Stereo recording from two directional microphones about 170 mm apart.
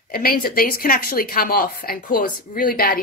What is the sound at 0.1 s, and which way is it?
Speech, 60° left (ahead or behind).